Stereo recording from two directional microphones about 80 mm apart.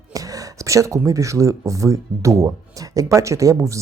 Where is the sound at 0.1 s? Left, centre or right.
Right.